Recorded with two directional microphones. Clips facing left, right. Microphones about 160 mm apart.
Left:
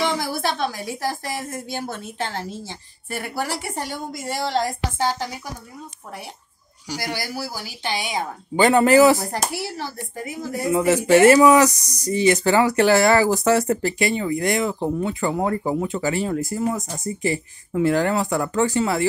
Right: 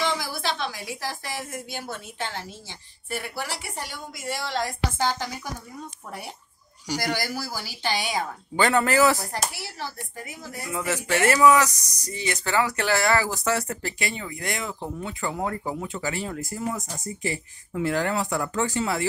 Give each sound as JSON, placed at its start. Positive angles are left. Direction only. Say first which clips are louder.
{"t": 0.0, "sound": "a woman's voice", "louder": "left 4 dB", "side_deg": 55}
{"t": 6.9, "sound": "speech", "louder": "right 1 dB", "side_deg": 10}
{"t": 10.6, "sound": "speech", "louder": "left 10 dB", "side_deg": 25}